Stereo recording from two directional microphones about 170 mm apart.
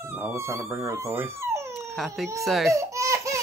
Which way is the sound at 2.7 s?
20° right (ahead or behind).